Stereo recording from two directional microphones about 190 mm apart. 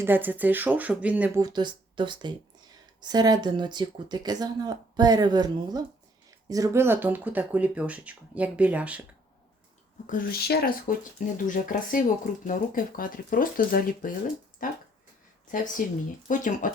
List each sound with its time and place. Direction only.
0.0 s speech: 10° right (ahead or behind)
1.4 s speech: 20° right (ahead or behind)
10.1 s speech: 50° left (ahead or behind)
11.4 s speech: 45° left (ahead or behind)